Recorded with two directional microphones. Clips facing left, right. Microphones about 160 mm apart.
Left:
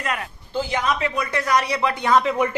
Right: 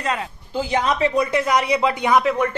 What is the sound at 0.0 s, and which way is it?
Speech, 30° right (ahead or behind).